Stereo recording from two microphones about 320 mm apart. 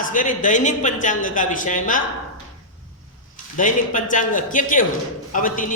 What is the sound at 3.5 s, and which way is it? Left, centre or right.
A man's voice, left.